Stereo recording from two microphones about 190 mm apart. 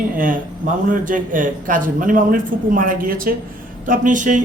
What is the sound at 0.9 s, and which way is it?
A man's voice, 45° right (ahead or behind).